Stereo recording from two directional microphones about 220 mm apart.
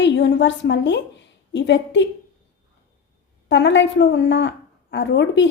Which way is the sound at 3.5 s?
55° left (ahead or behind).